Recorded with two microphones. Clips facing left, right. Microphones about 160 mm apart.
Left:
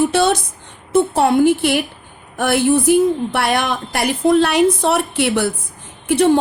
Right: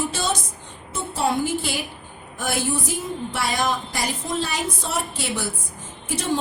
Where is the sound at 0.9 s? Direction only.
65° left (ahead or behind).